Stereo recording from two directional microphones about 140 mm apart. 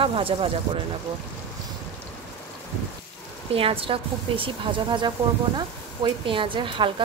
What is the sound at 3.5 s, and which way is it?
A woman's voice, 40° right (ahead or behind).